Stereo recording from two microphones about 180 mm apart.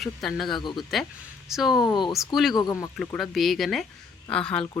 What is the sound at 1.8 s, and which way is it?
Speech, 25° left (ahead or behind).